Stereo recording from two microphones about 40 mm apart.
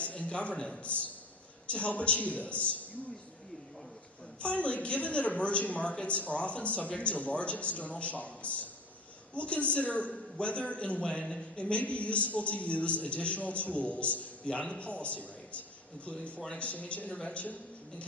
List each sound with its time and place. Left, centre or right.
0.0 s a sound: left
1.7 s a woman's voice: left
4.4 s a woman's voice: left